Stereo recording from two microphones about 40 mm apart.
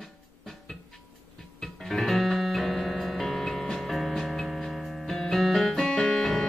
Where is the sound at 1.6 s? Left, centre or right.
Centre.